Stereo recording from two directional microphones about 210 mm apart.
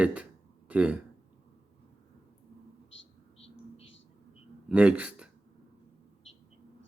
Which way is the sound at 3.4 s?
30° left (ahead or behind).